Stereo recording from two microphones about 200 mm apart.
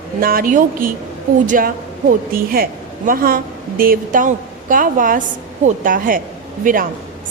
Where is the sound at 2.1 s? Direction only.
45° right (ahead or behind).